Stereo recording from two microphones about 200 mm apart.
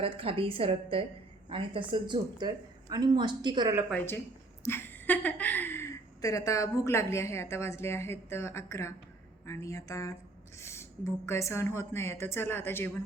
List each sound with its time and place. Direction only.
0.0 s a woman's voice: 30° right (ahead or behind)
3.8 s a woman's voice: 10° left (ahead or behind)